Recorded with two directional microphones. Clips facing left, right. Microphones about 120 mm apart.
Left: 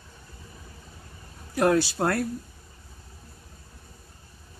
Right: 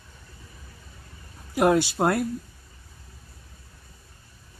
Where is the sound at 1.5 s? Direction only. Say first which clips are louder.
Right 2 dB; 20° right (ahead or behind).